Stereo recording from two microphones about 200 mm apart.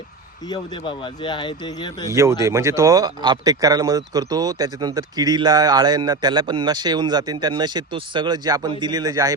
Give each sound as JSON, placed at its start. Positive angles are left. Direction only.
{"t": 0.4, "sound": "speech", "side_deg": 20}
{"t": 2.4, "sound": "speech", "side_deg": -15}